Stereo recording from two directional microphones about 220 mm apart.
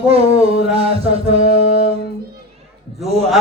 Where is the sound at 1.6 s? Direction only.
35° left (ahead or behind).